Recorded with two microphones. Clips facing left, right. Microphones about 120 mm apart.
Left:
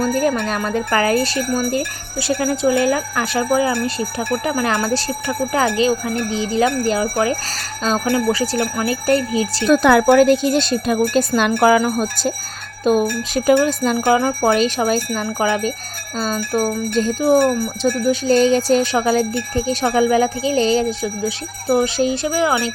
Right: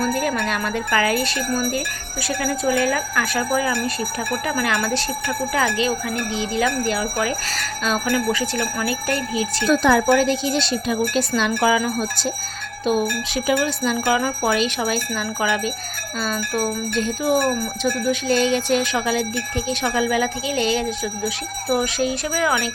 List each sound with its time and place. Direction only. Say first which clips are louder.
0.0 s speech: left 4 dB; 35° left (ahead or behind)
9.7 s speech: left 5 dB; 60° left (ahead or behind); by 22.7 s 30° left (ahead or behind)